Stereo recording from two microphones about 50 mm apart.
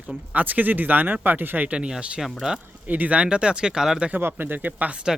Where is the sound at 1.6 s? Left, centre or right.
Right.